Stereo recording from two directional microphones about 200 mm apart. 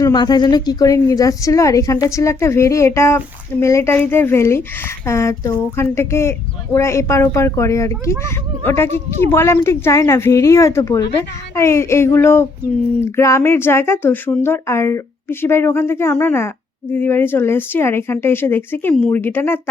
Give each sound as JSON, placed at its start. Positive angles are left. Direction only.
{"t": 0.0, "sound": "a woman's voice", "side_deg": 20}